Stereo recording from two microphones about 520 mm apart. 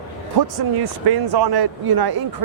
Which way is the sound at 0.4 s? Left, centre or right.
Right.